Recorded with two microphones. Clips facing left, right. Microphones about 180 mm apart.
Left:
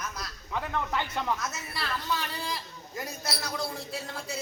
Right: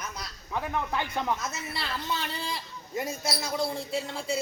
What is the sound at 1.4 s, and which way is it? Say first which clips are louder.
A woman's voice: right 1 dB; 25° right (ahead or behind).